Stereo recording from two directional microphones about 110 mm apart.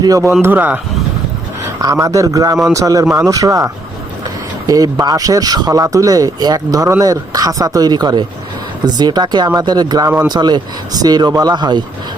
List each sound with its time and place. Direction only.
0.0 s speech: 30° right (ahead or behind)
0.4 s speech: 15° right (ahead or behind)
1.8 s speech: 30° right (ahead or behind)